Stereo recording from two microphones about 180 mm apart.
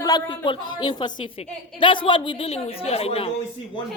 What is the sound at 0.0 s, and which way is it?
A woman's voice, 25° left (ahead or behind).